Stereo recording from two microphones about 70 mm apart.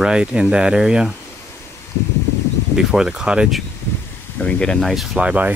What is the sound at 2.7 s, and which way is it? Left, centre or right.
Speech, centre.